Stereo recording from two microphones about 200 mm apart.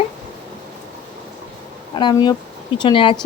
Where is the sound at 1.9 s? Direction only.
20° left (ahead or behind).